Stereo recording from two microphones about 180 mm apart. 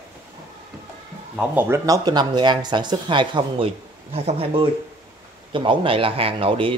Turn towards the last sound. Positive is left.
turn(degrees=-30)  # may be behind; listen again after turning